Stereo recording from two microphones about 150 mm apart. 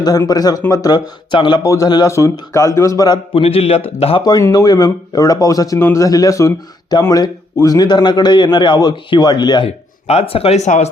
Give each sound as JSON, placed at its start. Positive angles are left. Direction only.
{"t": 0.0, "sound": "a man's voice", "side_deg": 25}
{"t": 3.3, "sound": "a man's voice", "side_deg": 40}
{"t": 4.2, "sound": "a man's voice", "side_deg": 25}
{"t": 9.6, "sound": "speech", "side_deg": 45}